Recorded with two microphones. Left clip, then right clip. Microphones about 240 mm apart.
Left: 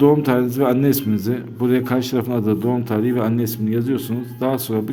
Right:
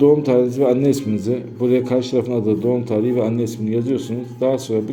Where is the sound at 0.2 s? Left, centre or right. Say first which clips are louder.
Right 2 dB; left.